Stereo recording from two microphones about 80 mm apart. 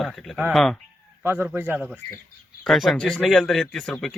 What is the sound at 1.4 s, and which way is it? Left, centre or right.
Speech, right.